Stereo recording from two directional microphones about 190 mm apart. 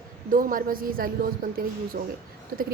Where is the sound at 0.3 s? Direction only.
45° right (ahead or behind).